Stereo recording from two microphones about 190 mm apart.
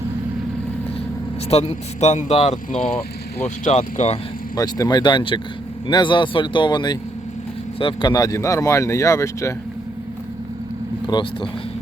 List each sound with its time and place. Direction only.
1.5 s speech: 35° left (ahead or behind)
4.5 s speech: 20° left (ahead or behind)
11.1 s speech: 20° left (ahead or behind)